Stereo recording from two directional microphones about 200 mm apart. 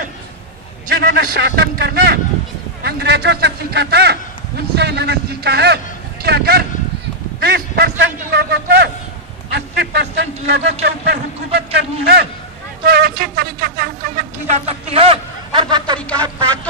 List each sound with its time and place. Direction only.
0.9 s a man's voice: 55° right (ahead or behind); by 16.0 s 20° right (ahead or behind)